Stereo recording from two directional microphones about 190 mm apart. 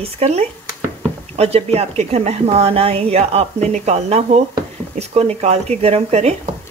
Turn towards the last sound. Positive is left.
turn(degrees=-35)  # may be behind; listen again after turning